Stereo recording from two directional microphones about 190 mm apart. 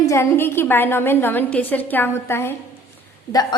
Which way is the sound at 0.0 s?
15° left (ahead or behind).